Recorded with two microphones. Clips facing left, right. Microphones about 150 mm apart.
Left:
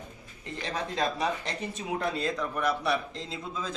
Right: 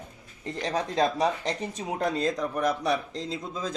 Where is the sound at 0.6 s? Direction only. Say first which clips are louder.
Right 5 dB; 35° right (ahead or behind).